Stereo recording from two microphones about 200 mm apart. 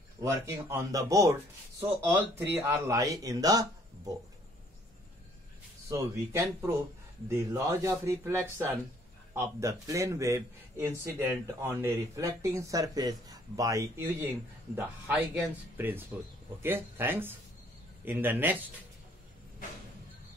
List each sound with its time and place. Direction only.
0.2 s a man's voice: 15° right (ahead or behind)
5.9 s a man's voice: 15° right (ahead or behind)